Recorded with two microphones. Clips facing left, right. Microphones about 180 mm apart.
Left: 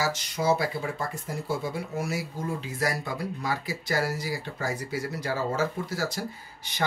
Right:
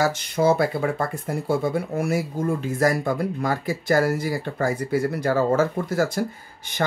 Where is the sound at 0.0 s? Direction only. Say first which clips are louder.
Right 7 dB; 55° right (ahead or behind).